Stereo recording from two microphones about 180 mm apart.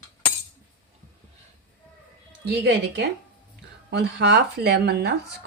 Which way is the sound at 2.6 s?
65° right (ahead or behind).